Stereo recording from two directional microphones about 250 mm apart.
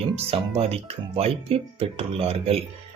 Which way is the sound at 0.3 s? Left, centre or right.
Right.